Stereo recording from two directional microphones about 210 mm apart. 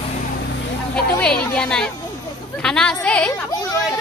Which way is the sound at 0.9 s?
5° left (ahead or behind).